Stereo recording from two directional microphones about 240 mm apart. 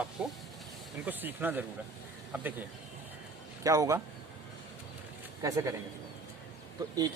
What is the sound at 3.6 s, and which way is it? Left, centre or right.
Speech, centre.